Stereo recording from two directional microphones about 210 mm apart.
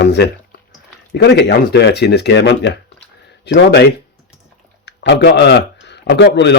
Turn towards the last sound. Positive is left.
turn(degrees=55)  # may be behind; listen again after turning